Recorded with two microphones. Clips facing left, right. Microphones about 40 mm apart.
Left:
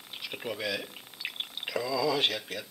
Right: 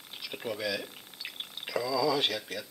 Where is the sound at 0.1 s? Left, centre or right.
Centre.